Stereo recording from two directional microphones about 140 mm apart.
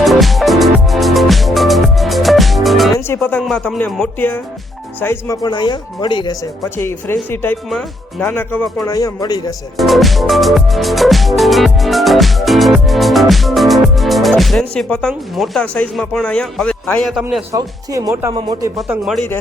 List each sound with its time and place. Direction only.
0.0 s music: centre (ahead or behind)
3.1 s speech: 10° left (ahead or behind)
5.4 s speech: 30° left (ahead or behind)
6.7 s speech: 15° left (ahead or behind)
8.9 s speech: 25° left (ahead or behind)
9.7 s music: centre (ahead or behind)
17.5 s speech: 25° right (ahead or behind)
18.3 s speech: 30° right (ahead or behind)